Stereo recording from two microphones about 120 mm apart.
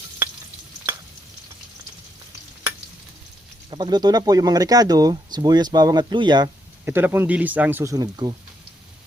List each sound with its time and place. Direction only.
3.7 s speech: 35° right (ahead or behind)
6.8 s speech: 20° right (ahead or behind)
7.9 s speech: 35° right (ahead or behind)